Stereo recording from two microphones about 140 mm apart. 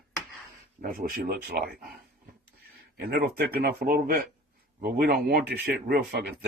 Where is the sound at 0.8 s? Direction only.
80° right.